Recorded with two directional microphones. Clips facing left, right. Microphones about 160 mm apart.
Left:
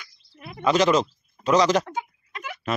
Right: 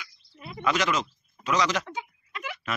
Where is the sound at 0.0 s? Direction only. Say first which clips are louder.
Left 1 dB; 55° left (ahead or behind).